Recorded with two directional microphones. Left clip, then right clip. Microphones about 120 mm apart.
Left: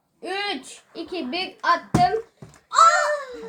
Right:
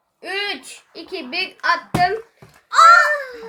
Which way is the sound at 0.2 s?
30° right (ahead or behind).